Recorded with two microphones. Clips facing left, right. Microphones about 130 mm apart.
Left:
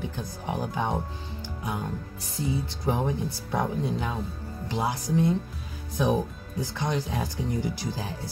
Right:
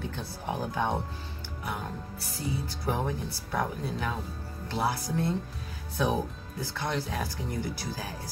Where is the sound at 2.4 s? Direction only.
20° left (ahead or behind).